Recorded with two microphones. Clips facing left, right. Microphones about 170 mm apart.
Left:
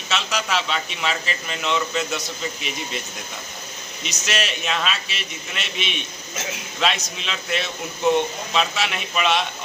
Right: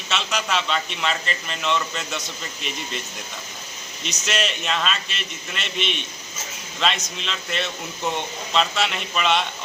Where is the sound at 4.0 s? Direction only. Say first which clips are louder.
Right 1 dB; 10° left (ahead or behind).